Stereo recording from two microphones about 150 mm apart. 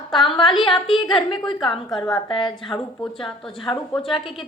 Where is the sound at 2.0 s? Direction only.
30° left (ahead or behind).